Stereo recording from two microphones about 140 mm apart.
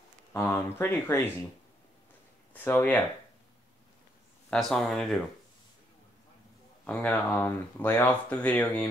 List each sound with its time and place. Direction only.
0.3 s speech: 20° left (ahead or behind)
2.5 s speech: 10° left (ahead or behind)
4.5 s speech: 5° left (ahead or behind)
6.8 s speech: 10° left (ahead or behind)